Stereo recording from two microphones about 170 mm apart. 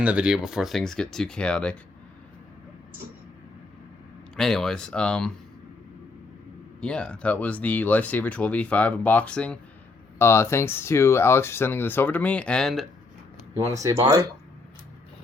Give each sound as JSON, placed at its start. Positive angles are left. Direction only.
{"t": 0.0, "sound": "speech", "side_deg": -5}
{"t": 4.4, "sound": "speech", "side_deg": 5}
{"t": 6.7, "sound": "speech", "side_deg": 5}
{"t": 13.6, "sound": "speech", "side_deg": -20}